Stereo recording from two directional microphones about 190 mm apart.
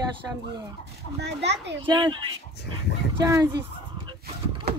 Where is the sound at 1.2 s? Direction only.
65° right (ahead or behind).